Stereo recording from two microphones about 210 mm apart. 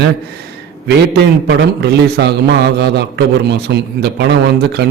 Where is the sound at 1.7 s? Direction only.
50° right (ahead or behind).